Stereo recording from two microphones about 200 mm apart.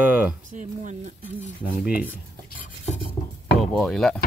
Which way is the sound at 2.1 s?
40° left (ahead or behind).